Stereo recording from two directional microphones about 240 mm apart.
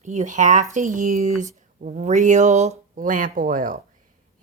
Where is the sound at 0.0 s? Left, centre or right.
Right.